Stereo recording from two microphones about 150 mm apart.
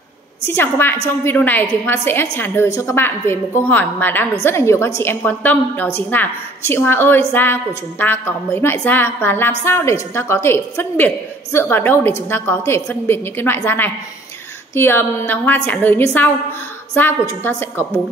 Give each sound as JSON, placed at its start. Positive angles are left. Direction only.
{"t": 0.5, "sound": "a woman's voice", "side_deg": 15}